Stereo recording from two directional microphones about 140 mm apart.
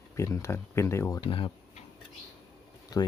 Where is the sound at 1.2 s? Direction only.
40° left (ahead or behind).